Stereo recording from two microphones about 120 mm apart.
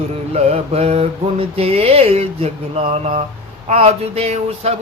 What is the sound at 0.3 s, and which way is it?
Mantra, 60° right (ahead or behind).